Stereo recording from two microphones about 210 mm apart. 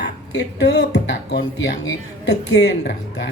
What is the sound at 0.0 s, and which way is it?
Speech, 55° left (ahead or behind).